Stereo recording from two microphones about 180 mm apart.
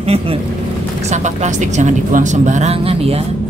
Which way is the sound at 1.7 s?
40° right (ahead or behind).